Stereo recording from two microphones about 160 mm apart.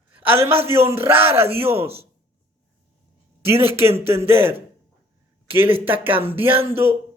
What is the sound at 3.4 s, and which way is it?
Speech, 15° right (ahead or behind).